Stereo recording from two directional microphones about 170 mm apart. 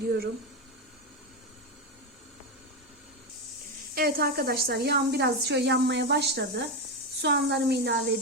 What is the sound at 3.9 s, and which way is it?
A woman's voice, 65° right (ahead or behind).